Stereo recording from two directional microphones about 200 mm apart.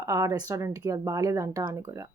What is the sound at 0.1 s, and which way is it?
Speech, 15° right (ahead or behind).